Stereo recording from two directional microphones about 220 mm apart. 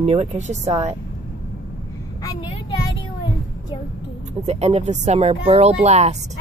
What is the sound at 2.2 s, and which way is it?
Vehicle, 20° left (ahead or behind).